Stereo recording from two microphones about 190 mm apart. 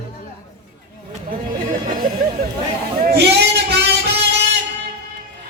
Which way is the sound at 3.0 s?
60° right (ahead or behind).